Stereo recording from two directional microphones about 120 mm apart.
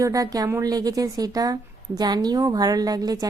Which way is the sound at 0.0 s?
30° right (ahead or behind).